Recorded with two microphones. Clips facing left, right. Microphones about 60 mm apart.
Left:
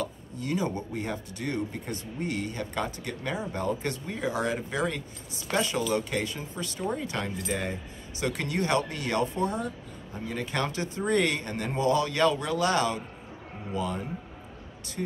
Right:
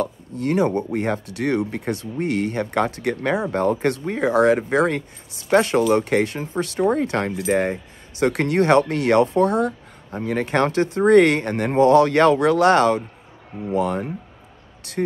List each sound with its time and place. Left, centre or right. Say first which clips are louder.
0.0 s speech: right 9 dB; right